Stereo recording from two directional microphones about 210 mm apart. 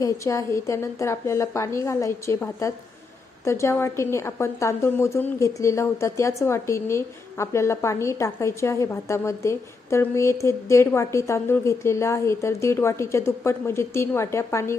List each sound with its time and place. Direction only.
0.0 s a woman's voice: 15° left (ahead or behind)